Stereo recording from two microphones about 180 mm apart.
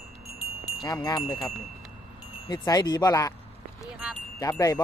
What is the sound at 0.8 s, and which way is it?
Speech, 20° left (ahead or behind).